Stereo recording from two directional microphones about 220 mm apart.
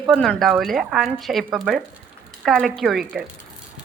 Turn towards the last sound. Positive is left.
turn(degrees=0)  # may be behind; listen again after turning